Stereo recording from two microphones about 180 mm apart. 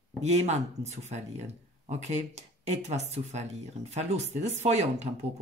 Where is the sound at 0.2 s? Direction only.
40° right (ahead or behind).